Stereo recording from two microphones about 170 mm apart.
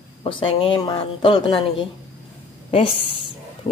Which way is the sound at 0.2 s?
30° left (ahead or behind).